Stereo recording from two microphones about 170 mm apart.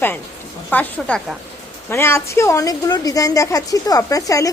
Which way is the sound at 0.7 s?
10° left (ahead or behind).